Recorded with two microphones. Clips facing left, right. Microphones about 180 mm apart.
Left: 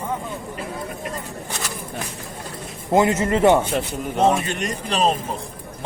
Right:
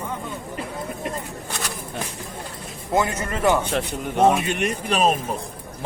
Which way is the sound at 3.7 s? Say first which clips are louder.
Left 1 dB; centre (ahead or behind).